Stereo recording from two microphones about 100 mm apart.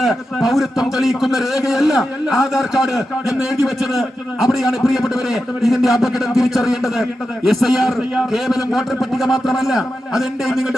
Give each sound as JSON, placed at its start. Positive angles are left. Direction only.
{"t": 0.0, "sound": "a man's voice", "side_deg": 0}